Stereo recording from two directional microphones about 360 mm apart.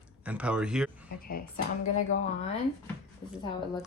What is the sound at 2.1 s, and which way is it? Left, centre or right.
Speech, left.